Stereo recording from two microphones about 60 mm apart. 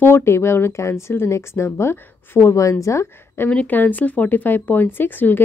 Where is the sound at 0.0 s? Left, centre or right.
Left.